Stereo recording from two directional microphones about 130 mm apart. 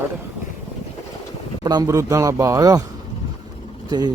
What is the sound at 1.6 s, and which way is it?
A man's voice, 30° right (ahead or behind).